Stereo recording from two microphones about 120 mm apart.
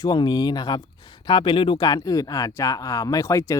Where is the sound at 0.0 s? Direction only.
35° left (ahead or behind).